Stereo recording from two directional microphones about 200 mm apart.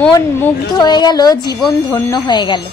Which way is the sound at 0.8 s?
20° left (ahead or behind).